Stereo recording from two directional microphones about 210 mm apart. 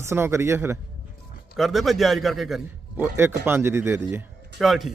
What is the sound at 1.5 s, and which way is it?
Speech, centre (ahead or behind).